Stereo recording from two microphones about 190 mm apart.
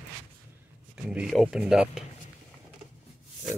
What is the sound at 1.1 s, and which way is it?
Speech, centre (ahead or behind).